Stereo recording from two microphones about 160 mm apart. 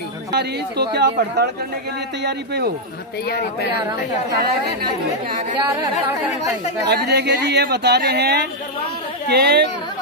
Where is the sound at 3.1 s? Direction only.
90° left.